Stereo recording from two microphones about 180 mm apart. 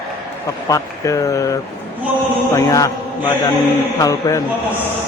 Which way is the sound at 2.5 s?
15° left (ahead or behind).